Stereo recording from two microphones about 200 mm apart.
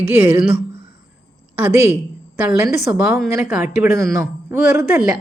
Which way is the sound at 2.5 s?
5° right (ahead or behind).